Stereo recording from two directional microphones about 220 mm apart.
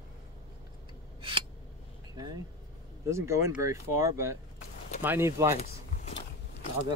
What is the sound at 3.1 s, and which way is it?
Speech, 10° right (ahead or behind).